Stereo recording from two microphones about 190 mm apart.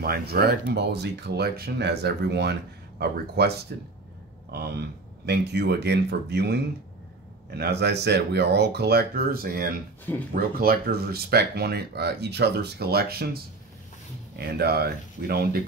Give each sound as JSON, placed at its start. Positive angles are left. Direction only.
{"t": 0.0, "sound": "speech", "side_deg": -55}
{"t": 14.4, "sound": "speech", "side_deg": -55}